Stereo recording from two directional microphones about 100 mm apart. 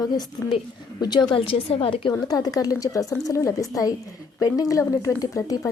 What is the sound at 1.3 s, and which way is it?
Speech, 65° left (ahead or behind).